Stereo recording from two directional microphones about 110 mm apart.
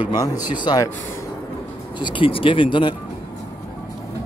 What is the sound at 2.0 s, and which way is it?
Speech, 45° left (ahead or behind).